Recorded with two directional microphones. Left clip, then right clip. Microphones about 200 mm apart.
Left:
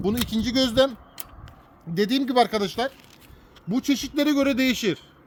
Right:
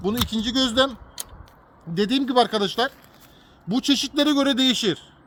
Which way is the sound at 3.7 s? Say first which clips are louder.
Right 3 dB; 15° left (ahead or behind).